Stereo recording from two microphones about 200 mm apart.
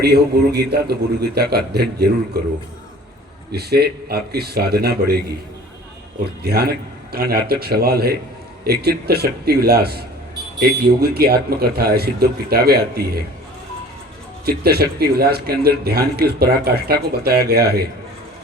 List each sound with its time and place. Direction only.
0.0 s a man's voice: 55° right (ahead or behind)
3.5 s a man's voice: 50° right (ahead or behind)
6.2 s a man's voice: 50° right (ahead or behind)
14.4 s a man's voice: 50° right (ahead or behind)